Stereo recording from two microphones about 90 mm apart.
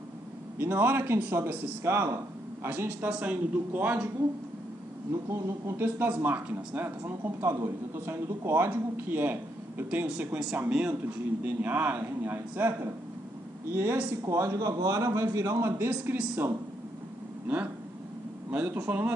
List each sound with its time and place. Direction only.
0.6 s a man's voice: 20° right (ahead or behind)
5.3 s speech: 30° right (ahead or behind)
13.7 s speech: 20° right (ahead or behind)
14.2 s a man's voice: 35° right (ahead or behind)
15.9 s speech: 15° right (ahead or behind)
18.5 s speech: 15° right (ahead or behind)